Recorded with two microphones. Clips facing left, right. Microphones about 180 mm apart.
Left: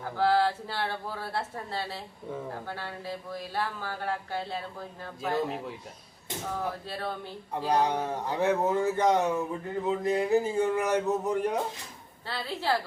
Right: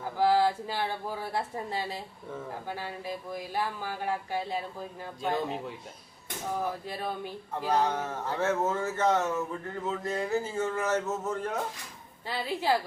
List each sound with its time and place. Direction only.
0.0 s speech: 15° right (ahead or behind)
5.2 s speech: centre (ahead or behind)
6.5 s speech: 15° right (ahead or behind)
7.5 s speech: 15° left (ahead or behind)
12.2 s speech: 15° right (ahead or behind)